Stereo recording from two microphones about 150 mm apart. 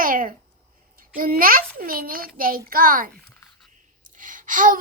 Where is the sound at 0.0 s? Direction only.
70° right (ahead or behind).